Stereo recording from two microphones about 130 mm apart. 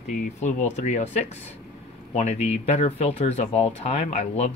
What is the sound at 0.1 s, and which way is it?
Speech, 75° left (ahead or behind).